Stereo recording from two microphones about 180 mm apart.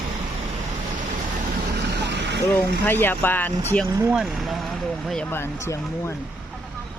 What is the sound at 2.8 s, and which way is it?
Speech, 10° left (ahead or behind).